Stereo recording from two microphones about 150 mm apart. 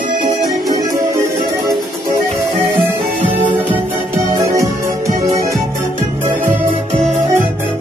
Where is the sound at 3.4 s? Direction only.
15° right (ahead or behind).